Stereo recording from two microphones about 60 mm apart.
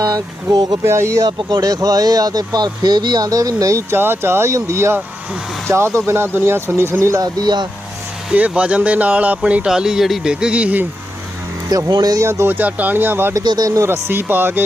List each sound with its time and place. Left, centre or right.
0.0 s speech: right
0.9 s speech: right
1.2 s speech: right
3.9 s speech: right
7.4 s speech: right
8.3 s speech: right
11.7 s speech: right
12.2 s speech: right
12.5 s speech: right
13.3 s speech: right
13.8 s speech: right